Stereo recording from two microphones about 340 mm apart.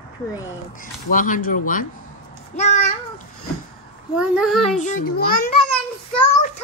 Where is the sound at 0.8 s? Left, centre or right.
Left.